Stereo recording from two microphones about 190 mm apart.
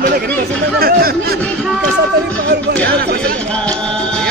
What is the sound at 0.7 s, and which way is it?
Chatter, 55° right (ahead or behind).